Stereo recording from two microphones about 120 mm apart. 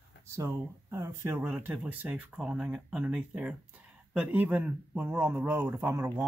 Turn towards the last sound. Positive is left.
turn(degrees=-20)  # may be behind; listen again after turning